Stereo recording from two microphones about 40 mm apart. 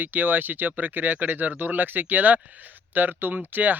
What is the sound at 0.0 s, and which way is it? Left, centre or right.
Speech, right.